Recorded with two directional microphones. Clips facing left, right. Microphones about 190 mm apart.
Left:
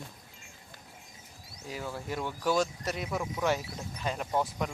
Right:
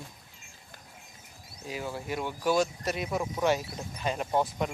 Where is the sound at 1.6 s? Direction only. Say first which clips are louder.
Right 2 dB; 15° right (ahead or behind).